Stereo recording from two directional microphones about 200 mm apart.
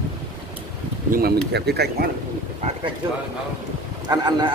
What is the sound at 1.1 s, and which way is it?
Speech, 50° right (ahead or behind).